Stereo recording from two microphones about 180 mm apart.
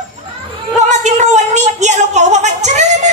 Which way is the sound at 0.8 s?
40° right (ahead or behind).